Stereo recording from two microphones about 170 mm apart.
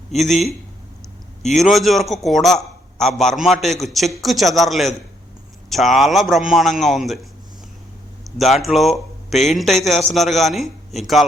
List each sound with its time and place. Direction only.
0.1 s a man's voice: centre (ahead or behind)
8.4 s a man's voice: centre (ahead or behind)